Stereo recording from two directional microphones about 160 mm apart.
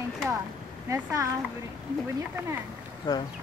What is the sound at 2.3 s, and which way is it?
Speech, 15° right (ahead or behind).